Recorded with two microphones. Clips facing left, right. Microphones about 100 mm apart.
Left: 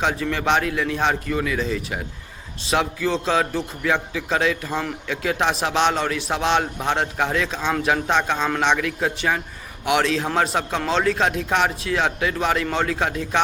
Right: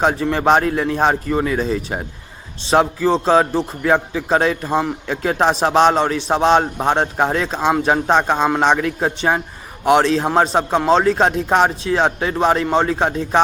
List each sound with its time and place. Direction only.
0.0 s a man's voice: 35° right (ahead or behind)